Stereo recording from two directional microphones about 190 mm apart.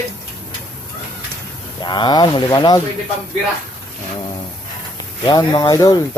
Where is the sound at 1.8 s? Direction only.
25° left (ahead or behind).